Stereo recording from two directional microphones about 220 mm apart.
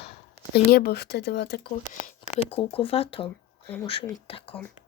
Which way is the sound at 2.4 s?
25° left (ahead or behind).